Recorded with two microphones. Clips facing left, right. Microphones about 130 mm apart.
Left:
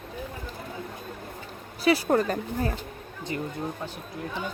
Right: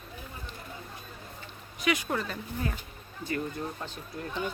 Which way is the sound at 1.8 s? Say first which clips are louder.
Left 8 dB; 35° left (ahead or behind).